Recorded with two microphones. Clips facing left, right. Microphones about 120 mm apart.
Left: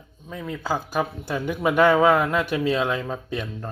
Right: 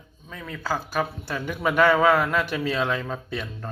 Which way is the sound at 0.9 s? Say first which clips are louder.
Left 2 dB; 10° left (ahead or behind).